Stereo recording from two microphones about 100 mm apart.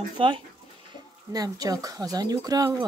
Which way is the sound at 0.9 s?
40° right (ahead or behind).